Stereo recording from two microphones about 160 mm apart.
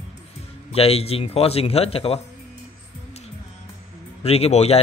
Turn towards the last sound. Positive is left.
turn(degrees=40)  # may be behind; listen again after turning